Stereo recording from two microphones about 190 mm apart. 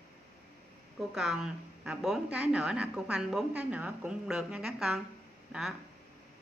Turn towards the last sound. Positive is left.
turn(degrees=-5)  # may be behind; listen again after turning